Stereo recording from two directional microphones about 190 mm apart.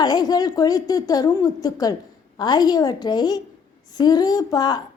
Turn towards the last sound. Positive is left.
turn(degrees=20)  # may be behind; listen again after turning